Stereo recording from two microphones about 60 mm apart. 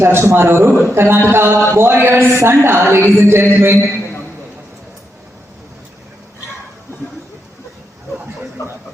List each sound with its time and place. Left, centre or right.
0.0 s speech: right
0.9 s a sound: right
2.3 s speech: right